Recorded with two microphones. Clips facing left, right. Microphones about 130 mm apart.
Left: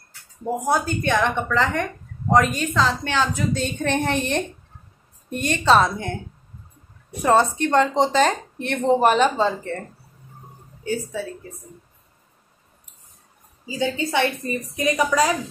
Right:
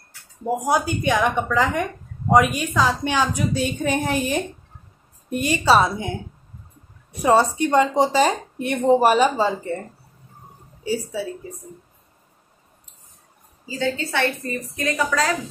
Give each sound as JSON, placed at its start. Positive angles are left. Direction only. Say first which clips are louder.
{"t": 0.5, "sound": "speech", "louder": "right 1 dB", "side_deg": -10}
{"t": 7.2, "sound": "speech", "louder": "right 1 dB", "side_deg": -10}
{"t": 13.7, "sound": "a woman's voice", "louder": "left 1 dB", "side_deg": 15}